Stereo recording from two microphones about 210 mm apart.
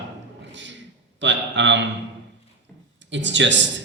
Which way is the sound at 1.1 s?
60° right (ahead or behind).